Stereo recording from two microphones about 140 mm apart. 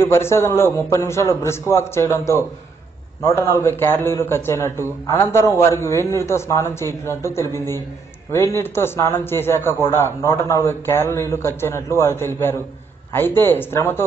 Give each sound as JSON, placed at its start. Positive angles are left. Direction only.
{"t": 0.0, "sound": "a man's voice", "side_deg": 20}